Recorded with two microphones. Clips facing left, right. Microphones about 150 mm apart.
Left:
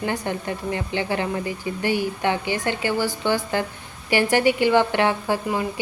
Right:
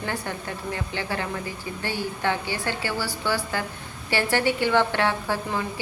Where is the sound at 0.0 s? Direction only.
20° left (ahead or behind).